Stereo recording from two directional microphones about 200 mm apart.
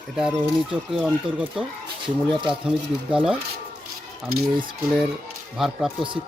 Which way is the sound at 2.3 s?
25° right (ahead or behind).